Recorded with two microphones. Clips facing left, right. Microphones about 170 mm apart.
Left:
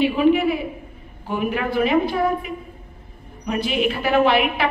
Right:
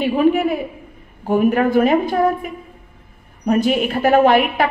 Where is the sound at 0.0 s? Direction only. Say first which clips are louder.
Right 1 dB; 45° right (ahead or behind).